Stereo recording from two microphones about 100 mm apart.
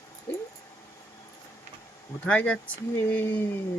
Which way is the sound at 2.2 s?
10° left (ahead or behind).